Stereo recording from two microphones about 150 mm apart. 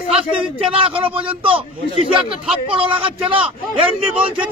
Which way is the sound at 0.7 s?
35° right (ahead or behind).